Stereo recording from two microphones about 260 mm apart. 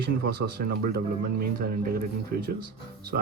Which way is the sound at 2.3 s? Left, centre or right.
Right.